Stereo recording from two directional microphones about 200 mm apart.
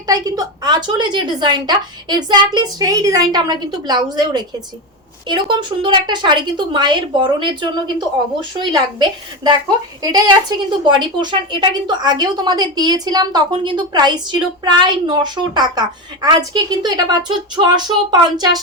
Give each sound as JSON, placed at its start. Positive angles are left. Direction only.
{"t": 0.1, "sound": "a woman's voice", "side_deg": -20}